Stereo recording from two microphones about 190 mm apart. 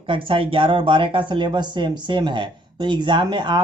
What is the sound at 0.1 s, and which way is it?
Speech, 25° right (ahead or behind).